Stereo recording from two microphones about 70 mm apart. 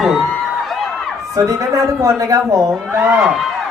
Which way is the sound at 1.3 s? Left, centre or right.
Right.